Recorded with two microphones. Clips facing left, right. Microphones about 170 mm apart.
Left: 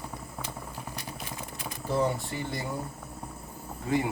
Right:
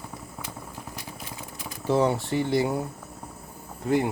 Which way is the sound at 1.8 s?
80° right.